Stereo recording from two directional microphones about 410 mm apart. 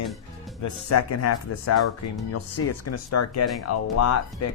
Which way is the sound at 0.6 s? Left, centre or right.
Left.